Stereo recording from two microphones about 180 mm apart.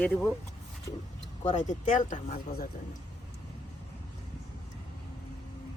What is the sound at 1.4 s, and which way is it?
Speech, 40° left (ahead or behind).